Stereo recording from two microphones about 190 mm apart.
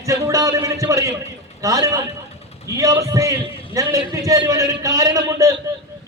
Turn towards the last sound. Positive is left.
turn(degrees=-15)  # may be behind; listen again after turning